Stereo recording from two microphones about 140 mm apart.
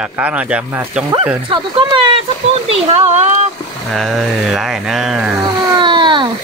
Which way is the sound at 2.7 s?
55° right (ahead or behind).